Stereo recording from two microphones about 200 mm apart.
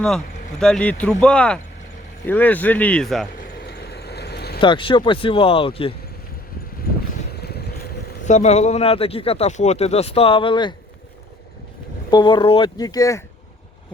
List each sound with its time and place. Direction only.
0.6 s speech: 5° left (ahead or behind)
3.7 s vehicle: 50° left (ahead or behind)
4.6 s speech: 25° left (ahead or behind)
7.3 s boat: 55° left (ahead or behind)
8.2 s speech: 35° left (ahead or behind)
12.1 s speech: 20° left (ahead or behind)